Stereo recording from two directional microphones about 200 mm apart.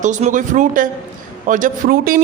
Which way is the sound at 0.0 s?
40° right (ahead or behind).